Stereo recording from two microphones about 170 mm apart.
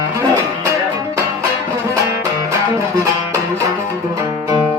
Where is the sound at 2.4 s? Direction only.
20° right (ahead or behind).